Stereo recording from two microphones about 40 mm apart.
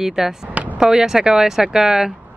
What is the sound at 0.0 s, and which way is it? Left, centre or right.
Speech, centre.